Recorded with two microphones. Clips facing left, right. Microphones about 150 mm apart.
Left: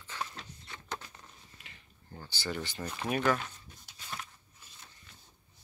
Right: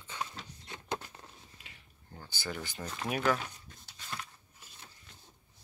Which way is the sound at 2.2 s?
Centre (ahead or behind).